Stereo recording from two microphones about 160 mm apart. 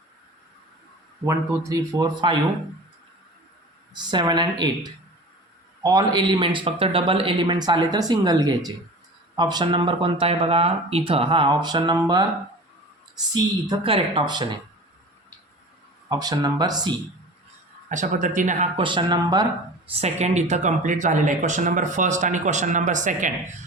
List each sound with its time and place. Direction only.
1.2 s speech: 20° right (ahead or behind)
3.9 s speech: 25° right (ahead or behind)
5.8 s speech: 25° right (ahead or behind)
16.0 s speech: 25° right (ahead or behind)
17.8 s speech: 50° right (ahead or behind)
18.8 s speech: 30° right (ahead or behind)
19.9 s speech: 40° right (ahead or behind)